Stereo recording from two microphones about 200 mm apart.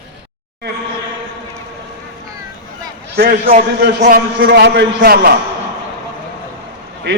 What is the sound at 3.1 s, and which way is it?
A man's voice, 50° right (ahead or behind).